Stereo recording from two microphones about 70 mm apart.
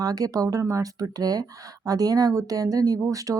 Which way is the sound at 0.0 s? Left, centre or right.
Right.